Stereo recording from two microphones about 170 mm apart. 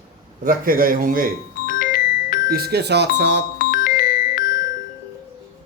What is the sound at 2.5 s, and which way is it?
Speech, 70° right (ahead or behind).